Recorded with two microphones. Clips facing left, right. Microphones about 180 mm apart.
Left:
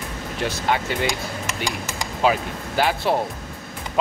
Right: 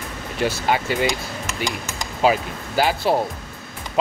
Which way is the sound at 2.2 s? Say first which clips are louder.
Right 2 dB; 5° right (ahead or behind).